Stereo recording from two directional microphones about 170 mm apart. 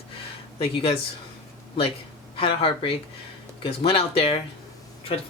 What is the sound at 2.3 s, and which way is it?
Speech, 35° left (ahead or behind).